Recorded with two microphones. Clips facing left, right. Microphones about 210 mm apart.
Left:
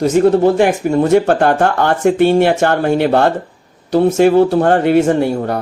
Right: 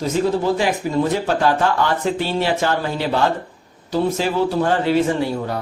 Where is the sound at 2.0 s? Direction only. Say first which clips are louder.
Left 10 dB; 65° left (ahead or behind).